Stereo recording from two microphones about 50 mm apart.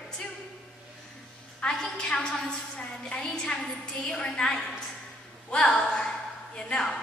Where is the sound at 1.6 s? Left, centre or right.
Centre.